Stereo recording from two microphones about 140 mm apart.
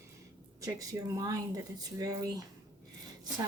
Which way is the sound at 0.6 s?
25° right (ahead or behind).